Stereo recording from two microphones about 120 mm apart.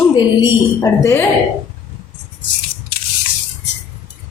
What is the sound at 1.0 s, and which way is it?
Speech, 20° left (ahead or behind).